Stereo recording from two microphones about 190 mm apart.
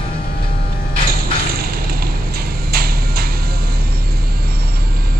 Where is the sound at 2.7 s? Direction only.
55° right (ahead or behind).